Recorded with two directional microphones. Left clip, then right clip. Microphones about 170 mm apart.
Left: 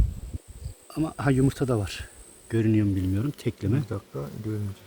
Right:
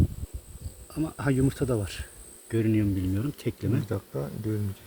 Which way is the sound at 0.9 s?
45° left (ahead or behind).